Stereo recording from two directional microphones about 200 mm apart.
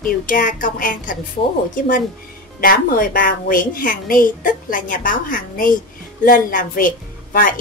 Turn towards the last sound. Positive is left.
turn(degrees=45)  # may be behind; listen again after turning